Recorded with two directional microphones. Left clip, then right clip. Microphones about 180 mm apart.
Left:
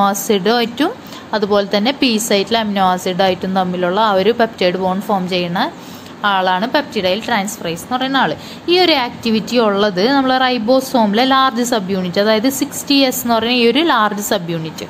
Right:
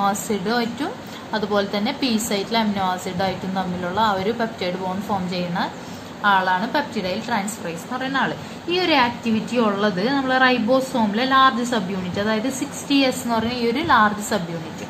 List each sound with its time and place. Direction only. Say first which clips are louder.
0.0 s a woman's voice: left 8 dB; 45° left (ahead or behind)